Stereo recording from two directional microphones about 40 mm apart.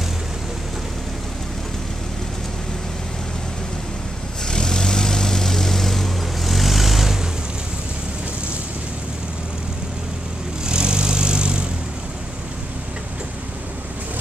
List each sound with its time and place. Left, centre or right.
4.5 s vehicle: centre
10.6 s vehicle: right